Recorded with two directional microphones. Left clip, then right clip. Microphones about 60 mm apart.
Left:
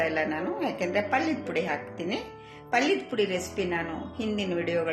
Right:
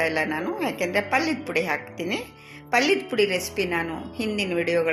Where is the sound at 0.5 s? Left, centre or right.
Right.